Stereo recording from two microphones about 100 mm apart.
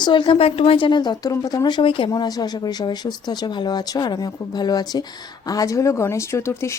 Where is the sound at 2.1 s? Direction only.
40° left (ahead or behind).